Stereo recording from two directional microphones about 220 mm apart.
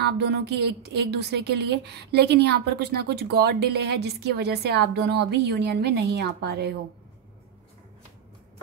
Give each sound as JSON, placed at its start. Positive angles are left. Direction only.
{"t": 0.0, "sound": "a woman's voice", "side_deg": -45}